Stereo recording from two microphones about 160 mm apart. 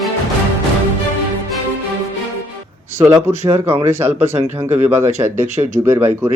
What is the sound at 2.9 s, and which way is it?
Speech, 15° right (ahead or behind).